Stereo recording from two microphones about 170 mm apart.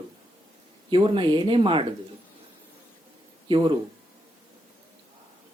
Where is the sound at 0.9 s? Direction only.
30° right (ahead or behind).